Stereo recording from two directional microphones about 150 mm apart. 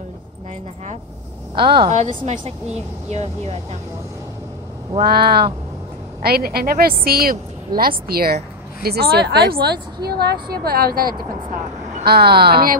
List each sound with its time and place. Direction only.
1.9 s speech: 50° right (ahead or behind)
5.0 s a woman's voice: 90° right